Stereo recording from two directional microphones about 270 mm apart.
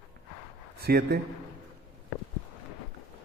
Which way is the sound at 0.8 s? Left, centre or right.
Right.